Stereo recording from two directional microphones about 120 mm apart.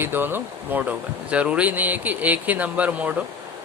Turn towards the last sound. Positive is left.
turn(degrees=-10)  # may be behind; listen again after turning